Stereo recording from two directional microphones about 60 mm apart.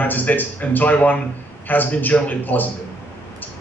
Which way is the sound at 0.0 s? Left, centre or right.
Left.